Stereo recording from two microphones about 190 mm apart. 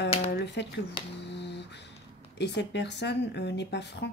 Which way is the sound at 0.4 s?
65° left (ahead or behind).